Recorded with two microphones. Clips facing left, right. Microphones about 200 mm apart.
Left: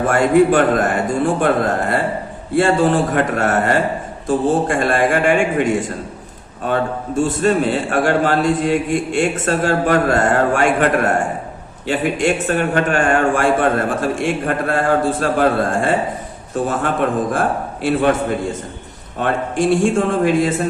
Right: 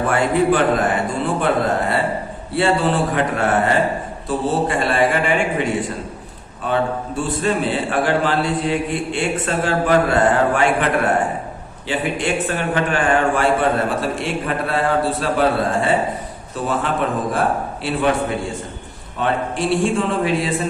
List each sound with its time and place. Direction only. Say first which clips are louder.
0.1 s a man's voice: left 5 dB; 45° left (ahead or behind)
6.6 s a man's voice: left 1 dB; 45° left (ahead or behind)
19.2 s a man's voice: left 3 dB; 45° left (ahead or behind)